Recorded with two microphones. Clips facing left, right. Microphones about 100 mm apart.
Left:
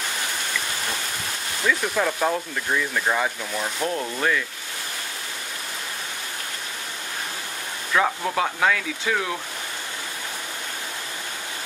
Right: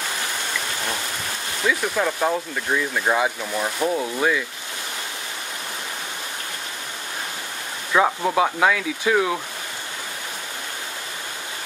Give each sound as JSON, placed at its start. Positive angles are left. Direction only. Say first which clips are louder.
{"t": 1.7, "sound": "speech", "louder": "right 1 dB", "side_deg": -5}
{"t": 7.9, "sound": "speech", "louder": "right 3 dB", "side_deg": -15}